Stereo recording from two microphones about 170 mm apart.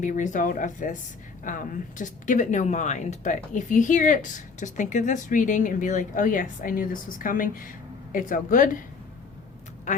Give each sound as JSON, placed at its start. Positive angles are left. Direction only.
{"t": 0.0, "sound": "speech", "side_deg": 50}